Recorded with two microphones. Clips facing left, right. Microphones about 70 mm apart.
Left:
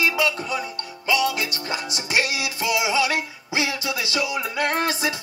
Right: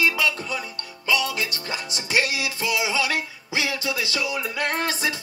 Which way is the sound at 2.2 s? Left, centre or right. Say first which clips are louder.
Even; right.